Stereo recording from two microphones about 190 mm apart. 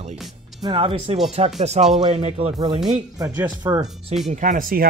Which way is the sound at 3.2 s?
15° right (ahead or behind).